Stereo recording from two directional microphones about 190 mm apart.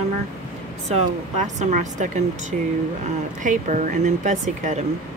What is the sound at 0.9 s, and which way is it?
Speech, 40° right (ahead or behind).